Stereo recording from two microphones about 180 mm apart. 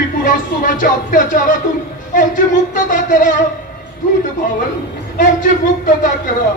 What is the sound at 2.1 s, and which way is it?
Speech, 45° left (ahead or behind).